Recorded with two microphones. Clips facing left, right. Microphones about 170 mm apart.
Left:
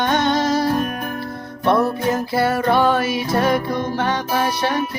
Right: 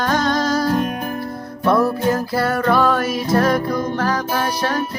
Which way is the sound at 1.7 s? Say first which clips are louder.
Right 1 dB; 25° left (ahead or behind).